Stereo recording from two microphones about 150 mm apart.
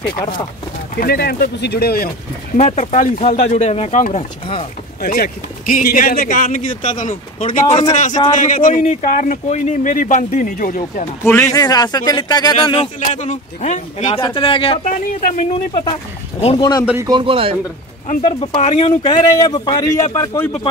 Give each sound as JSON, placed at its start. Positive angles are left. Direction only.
{"t": 0.9, "sound": "speech", "side_deg": 90}
{"t": 2.5, "sound": "speech", "side_deg": 50}
{"t": 5.0, "sound": "speech", "side_deg": 80}
{"t": 11.2, "sound": "speech", "side_deg": 20}
{"t": 13.0, "sound": "speech", "side_deg": 55}
{"t": 14.2, "sound": "speech", "side_deg": 35}
{"t": 14.9, "sound": "speech", "side_deg": 60}
{"t": 15.7, "sound": "speech", "side_deg": 35}
{"t": 16.8, "sound": "speech", "side_deg": -15}
{"t": 17.1, "sound": "speech", "side_deg": -35}
{"t": 18.5, "sound": "speech", "side_deg": 45}
{"t": 19.0, "sound": "speech", "side_deg": 30}